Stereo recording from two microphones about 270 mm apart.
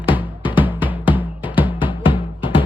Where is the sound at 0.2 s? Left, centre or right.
Centre.